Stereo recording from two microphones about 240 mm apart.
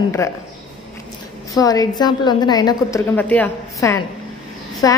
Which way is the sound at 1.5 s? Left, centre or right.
Centre.